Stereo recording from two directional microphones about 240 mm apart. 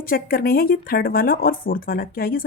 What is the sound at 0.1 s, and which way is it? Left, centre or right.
Speech, left.